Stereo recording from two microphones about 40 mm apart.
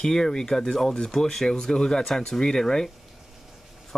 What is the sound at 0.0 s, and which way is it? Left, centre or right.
Speech, centre.